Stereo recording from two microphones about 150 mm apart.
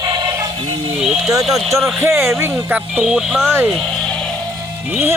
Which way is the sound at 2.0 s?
15° right (ahead or behind).